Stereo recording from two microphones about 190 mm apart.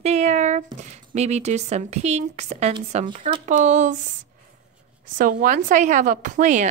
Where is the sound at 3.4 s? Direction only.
40° right (ahead or behind).